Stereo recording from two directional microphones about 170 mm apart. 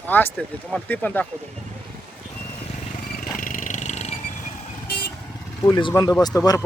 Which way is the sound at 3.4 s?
50° left (ahead or behind).